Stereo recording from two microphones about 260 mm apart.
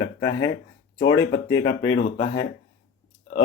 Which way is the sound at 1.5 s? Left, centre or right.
Left.